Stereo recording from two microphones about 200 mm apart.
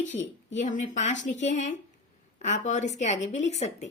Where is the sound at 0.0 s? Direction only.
35° left (ahead or behind).